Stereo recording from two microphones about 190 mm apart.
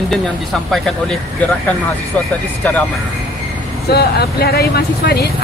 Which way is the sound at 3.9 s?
55° left (ahead or behind).